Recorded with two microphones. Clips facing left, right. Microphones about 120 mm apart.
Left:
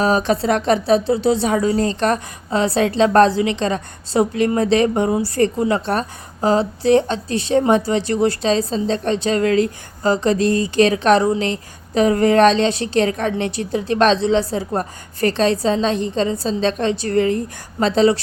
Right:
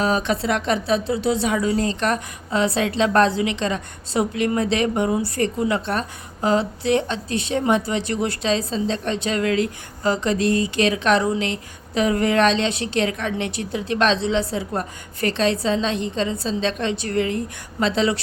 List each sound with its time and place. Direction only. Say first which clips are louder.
0.0 s speech: left 4 dB; 40° left (ahead or behind)